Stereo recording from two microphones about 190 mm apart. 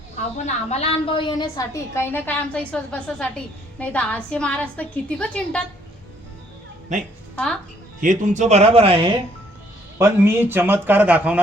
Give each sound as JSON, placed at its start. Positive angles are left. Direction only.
{"t": 0.4, "sound": "a woman's voice", "side_deg": 35}
{"t": 8.0, "sound": "speech", "side_deg": -40}
{"t": 10.0, "sound": "a man's voice", "side_deg": -10}